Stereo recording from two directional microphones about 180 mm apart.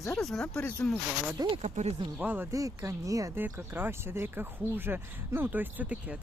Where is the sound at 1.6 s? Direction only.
40° right (ahead or behind).